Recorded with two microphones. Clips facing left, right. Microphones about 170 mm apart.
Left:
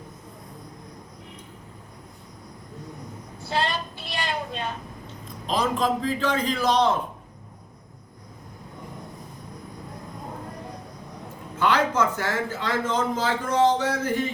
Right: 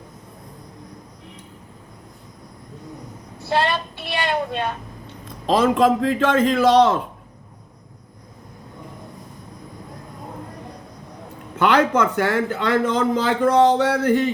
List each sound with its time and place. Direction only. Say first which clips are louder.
3.5 s a sound: right 6 dB; 65° right (ahead or behind)
5.5 s a man's voice: right 8 dB; 70° right (ahead or behind)
11.6 s a man's voice: right 5 dB; 65° right (ahead or behind)